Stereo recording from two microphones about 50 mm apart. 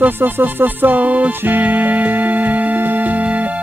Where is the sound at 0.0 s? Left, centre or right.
Right.